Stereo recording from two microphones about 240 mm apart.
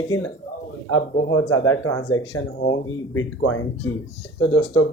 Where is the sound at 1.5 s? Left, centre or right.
Left.